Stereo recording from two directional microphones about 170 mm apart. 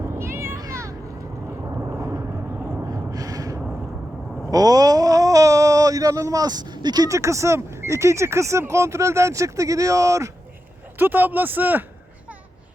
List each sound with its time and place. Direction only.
0.2 s a sound: 15° right (ahead or behind)
1.8 s vehicle: 15° right (ahead or behind)
2.6 s gasp: 20° right (ahead or behind)
4.5 s speech: 20° right (ahead or behind)